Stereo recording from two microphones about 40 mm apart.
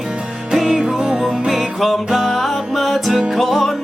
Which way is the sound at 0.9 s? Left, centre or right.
Centre.